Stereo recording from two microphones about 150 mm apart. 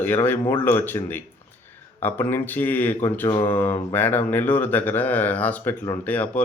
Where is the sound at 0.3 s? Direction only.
15° left (ahead or behind).